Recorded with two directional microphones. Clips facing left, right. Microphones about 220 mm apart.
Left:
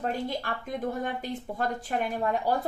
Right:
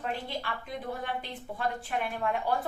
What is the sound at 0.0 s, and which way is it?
A woman's voice, 45° left (ahead or behind).